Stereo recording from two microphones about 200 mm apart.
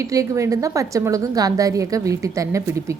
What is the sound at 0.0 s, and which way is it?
A woman's voice, 15° right (ahead or behind).